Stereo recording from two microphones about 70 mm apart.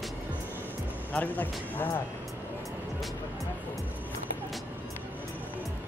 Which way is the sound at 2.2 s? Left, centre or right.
Centre.